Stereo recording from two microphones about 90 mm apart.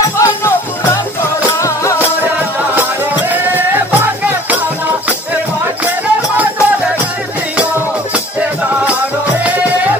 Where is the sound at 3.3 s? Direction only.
20° right (ahead or behind).